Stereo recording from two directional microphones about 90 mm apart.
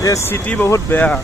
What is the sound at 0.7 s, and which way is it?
Speech, 30° left (ahead or behind).